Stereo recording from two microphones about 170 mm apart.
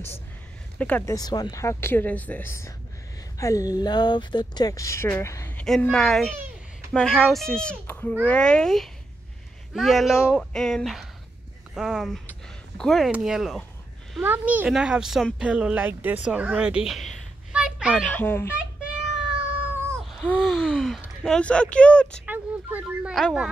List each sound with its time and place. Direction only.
0.7 s speech: 10° left (ahead or behind)
1.1 s speech: 25° left (ahead or behind)
5.7 s speech: 5° left (ahead or behind)
18.0 s speech: 10° left (ahead or behind)
20.1 s gasp: centre (ahead or behind)
21.2 s speech: 5° left (ahead or behind)
22.2 s speech: 10° right (ahead or behind)